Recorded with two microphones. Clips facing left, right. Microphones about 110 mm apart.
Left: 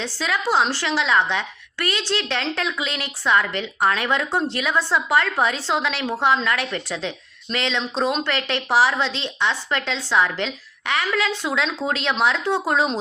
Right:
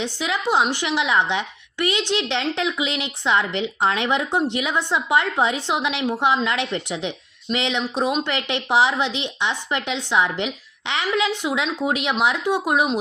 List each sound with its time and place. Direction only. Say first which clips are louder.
0.0 s a woman's voice: even; 20° right (ahead or behind)